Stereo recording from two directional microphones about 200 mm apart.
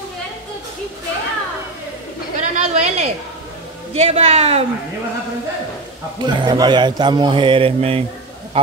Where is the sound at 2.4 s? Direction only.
35° right (ahead or behind).